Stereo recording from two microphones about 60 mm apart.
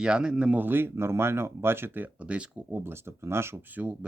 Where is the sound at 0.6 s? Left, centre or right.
Right.